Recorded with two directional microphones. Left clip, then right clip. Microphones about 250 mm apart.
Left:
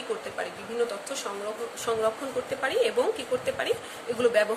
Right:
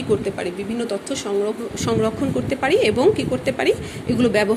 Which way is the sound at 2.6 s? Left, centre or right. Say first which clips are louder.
Right 9 dB; centre.